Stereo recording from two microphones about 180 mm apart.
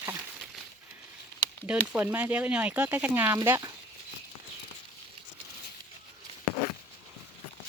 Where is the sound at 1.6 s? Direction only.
5° right (ahead or behind).